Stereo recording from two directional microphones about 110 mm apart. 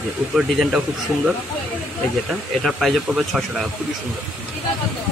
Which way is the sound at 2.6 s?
Centre (ahead or behind).